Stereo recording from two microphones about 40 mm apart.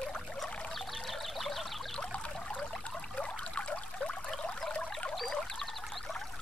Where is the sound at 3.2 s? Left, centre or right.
Left.